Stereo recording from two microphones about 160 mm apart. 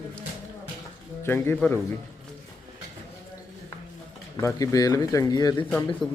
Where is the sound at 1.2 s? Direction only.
15° left (ahead or behind).